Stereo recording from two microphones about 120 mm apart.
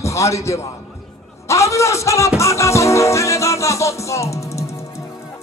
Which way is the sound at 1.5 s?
25° left (ahead or behind).